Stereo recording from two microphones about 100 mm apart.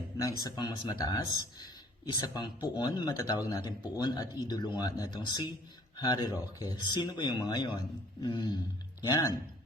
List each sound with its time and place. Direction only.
0.2 s speech: 40° left (ahead or behind)